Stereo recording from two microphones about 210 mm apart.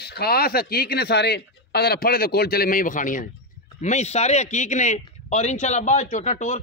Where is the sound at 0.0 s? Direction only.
50° left (ahead or behind).